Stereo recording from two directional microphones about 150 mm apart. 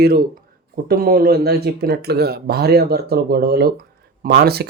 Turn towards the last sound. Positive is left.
turn(degrees=-90)